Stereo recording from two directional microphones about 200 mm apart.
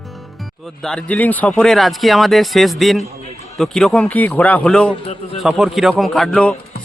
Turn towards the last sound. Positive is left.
turn(degrees=5)  # may be behind; listen again after turning